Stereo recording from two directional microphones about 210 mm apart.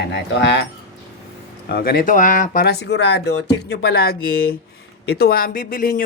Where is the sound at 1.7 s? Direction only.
45° left (ahead or behind).